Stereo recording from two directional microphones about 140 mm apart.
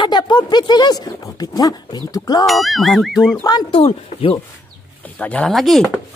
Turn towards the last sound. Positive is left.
turn(degrees=0)  # may be behind; listen again after turning